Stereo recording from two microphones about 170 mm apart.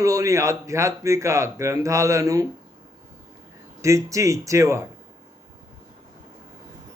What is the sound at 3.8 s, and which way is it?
A man's voice, 20° right (ahead or behind).